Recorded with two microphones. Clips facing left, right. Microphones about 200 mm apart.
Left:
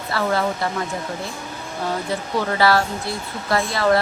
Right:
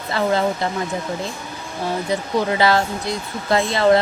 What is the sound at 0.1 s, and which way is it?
Speech, 20° right (ahead or behind).